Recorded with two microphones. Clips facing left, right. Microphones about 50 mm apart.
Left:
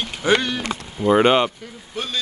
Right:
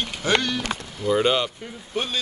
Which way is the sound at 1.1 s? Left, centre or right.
Left.